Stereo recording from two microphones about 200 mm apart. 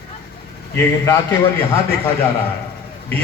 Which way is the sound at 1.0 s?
15° left (ahead or behind).